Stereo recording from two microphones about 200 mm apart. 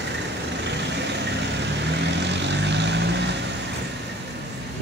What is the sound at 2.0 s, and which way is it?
Vehicle, 60° right (ahead or behind).